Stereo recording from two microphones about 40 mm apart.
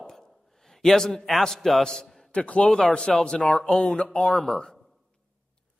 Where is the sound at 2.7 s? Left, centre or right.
Left.